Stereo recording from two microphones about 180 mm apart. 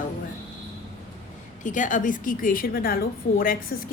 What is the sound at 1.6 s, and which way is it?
A woman's voice, 45° left (ahead or behind).